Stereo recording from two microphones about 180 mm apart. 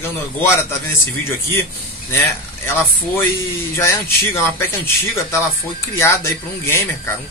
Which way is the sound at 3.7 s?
15° left (ahead or behind).